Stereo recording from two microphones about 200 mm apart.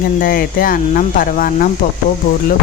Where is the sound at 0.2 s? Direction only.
45° left (ahead or behind).